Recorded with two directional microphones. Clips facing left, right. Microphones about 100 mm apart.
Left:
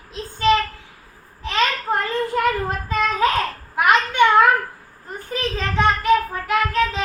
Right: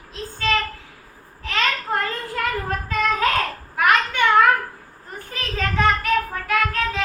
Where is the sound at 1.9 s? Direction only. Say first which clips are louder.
Left 2 dB; 30° left (ahead or behind).